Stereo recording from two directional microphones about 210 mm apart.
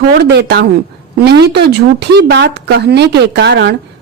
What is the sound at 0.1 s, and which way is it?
A woman's voice, 50° right (ahead or behind).